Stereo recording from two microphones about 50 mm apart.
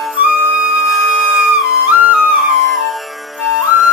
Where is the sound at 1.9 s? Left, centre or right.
Right.